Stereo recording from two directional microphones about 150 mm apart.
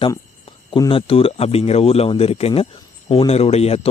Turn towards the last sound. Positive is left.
turn(degrees=40)  # may be behind; listen again after turning